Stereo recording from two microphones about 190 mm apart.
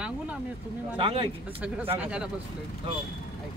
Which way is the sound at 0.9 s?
25° right (ahead or behind).